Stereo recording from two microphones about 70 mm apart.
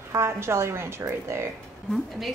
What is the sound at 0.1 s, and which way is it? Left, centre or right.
A woman's voice, right.